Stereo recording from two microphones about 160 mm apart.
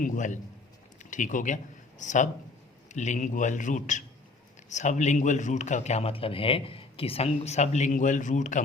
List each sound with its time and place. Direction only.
0.0 s a man's voice: 55° left (ahead or behind)
0.9 s a sound: 50° left (ahead or behind)
2.0 s a man's voice: 50° left (ahead or behind)